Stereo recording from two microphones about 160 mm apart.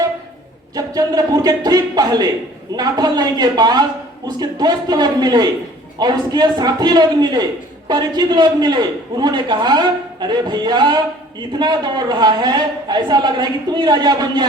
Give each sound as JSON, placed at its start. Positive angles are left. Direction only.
{"t": 0.8, "sound": "a man's voice", "side_deg": -25}